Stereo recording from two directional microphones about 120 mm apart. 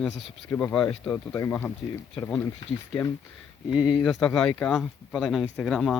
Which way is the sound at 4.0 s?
5° left (ahead or behind).